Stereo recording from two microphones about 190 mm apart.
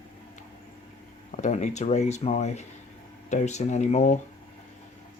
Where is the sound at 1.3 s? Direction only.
40° left (ahead or behind).